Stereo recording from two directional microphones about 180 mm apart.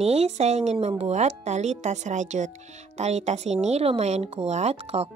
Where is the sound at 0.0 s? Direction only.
35° right (ahead or behind).